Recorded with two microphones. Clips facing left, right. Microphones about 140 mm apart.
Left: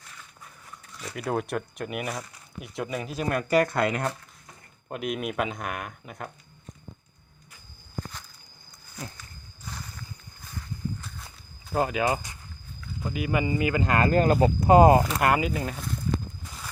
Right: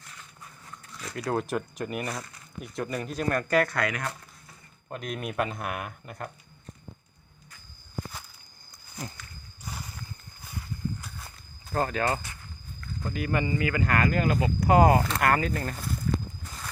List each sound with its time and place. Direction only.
1.0 s speech: 5° left (ahead or behind); by 4.1 s 25° left (ahead or behind)
4.9 s speech: 10° left (ahead or behind)
11.7 s speech: 10° left (ahead or behind)
13.5 s speech: 20° left (ahead or behind)
14.1 s speech: 35° left (ahead or behind)
15.0 s speech: 10° left (ahead or behind)